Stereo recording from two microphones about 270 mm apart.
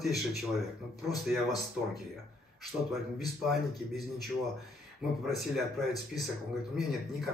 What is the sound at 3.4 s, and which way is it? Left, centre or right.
A man's voice, centre.